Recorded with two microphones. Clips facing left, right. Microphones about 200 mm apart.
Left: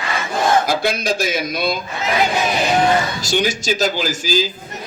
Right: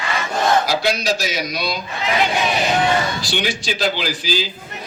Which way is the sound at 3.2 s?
45° left (ahead or behind).